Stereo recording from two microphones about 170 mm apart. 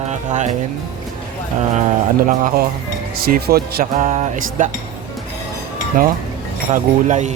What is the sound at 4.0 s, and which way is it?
Music, 40° right (ahead or behind).